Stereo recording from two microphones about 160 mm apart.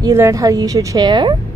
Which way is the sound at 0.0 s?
20° right (ahead or behind).